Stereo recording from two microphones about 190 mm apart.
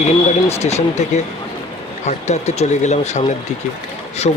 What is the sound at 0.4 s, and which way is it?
Speech, 35° left (ahead or behind).